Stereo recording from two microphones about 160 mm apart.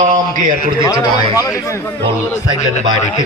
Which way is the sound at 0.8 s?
20° left (ahead or behind).